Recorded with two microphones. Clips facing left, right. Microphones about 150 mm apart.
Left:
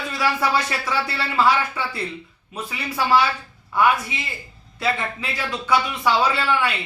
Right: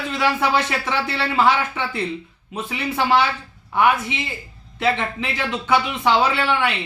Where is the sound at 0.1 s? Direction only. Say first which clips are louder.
Right 2 dB; 25° right (ahead or behind).